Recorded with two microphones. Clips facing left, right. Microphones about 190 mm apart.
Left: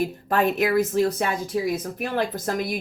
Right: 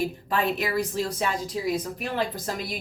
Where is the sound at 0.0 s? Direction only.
45° left (ahead or behind).